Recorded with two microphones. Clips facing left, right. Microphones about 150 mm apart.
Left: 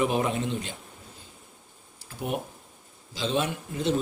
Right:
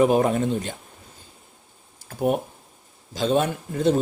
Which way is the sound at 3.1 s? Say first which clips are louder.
Right 6 dB; 45° right (ahead or behind).